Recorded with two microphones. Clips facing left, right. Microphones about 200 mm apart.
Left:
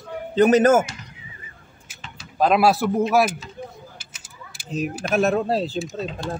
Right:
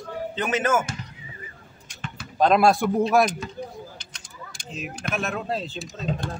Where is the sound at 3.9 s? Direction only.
5° left (ahead or behind).